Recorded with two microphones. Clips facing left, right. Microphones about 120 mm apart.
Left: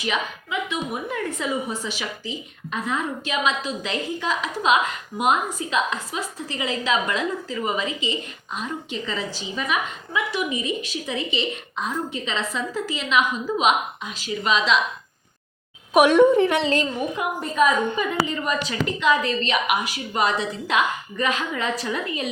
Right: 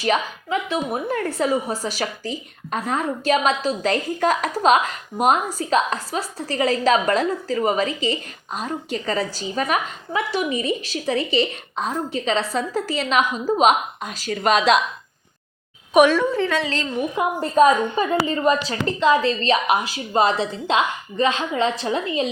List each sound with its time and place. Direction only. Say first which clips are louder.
0.0 s a woman's voice: right 5 dB; 40° right (ahead or behind)
16.0 s a woman's voice: left 4 dB; 20° left (ahead or behind)
17.2 s a woman's voice: right 6 dB; 35° right (ahead or behind)